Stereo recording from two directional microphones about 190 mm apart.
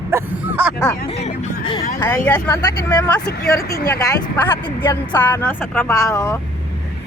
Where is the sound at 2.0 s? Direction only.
10° left (ahead or behind).